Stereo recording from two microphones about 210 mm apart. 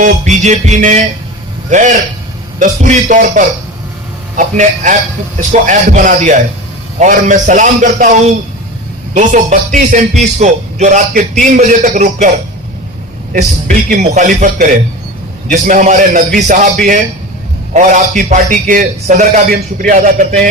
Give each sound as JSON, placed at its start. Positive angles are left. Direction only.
{"t": 0.0, "sound": "a man's voice", "side_deg": -35}
{"t": 9.1, "sound": "a man's voice", "side_deg": -35}
{"t": 13.3, "sound": "a man's voice", "side_deg": -35}
{"t": 17.7, "sound": "a man's voice", "side_deg": -35}